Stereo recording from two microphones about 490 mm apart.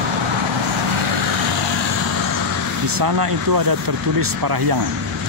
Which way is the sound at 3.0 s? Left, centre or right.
Right.